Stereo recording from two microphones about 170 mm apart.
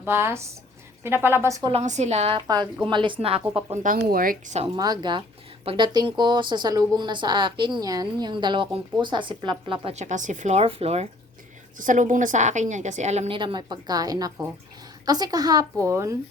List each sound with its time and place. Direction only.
0.0 s a woman's voice: 15° right (ahead or behind)
1.7 s a woman's voice: 45° right (ahead or behind)
3.8 s speech: 55° right (ahead or behind)
4.8 s speech: 25° right (ahead or behind)
11.8 s a woman's voice: 50° right (ahead or behind); by 16.1 s 15° right (ahead or behind)